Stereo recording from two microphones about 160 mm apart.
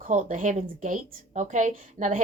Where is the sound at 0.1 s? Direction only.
50° right (ahead or behind).